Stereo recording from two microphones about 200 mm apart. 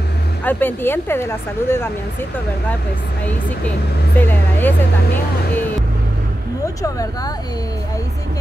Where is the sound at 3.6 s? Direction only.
10° left (ahead or behind).